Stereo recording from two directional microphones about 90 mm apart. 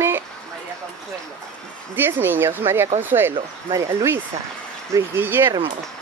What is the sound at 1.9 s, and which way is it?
Speech, 20° right (ahead or behind).